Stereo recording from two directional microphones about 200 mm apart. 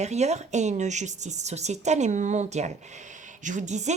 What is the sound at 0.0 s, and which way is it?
A woman's voice, 35° right (ahead or behind).